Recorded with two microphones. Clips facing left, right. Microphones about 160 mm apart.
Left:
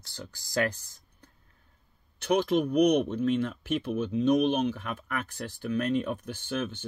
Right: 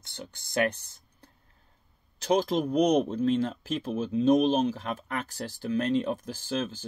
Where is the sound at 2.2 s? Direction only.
35° right (ahead or behind).